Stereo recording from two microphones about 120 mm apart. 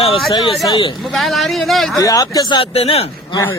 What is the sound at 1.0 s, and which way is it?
Speech, centre (ahead or behind).